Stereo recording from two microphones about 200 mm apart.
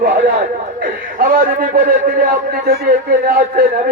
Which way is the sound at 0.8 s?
45° right (ahead or behind).